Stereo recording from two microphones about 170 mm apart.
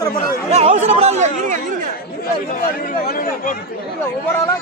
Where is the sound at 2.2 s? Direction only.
60° left (ahead or behind).